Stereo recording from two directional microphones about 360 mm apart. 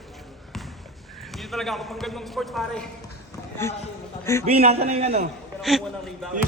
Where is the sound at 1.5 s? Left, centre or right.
Centre.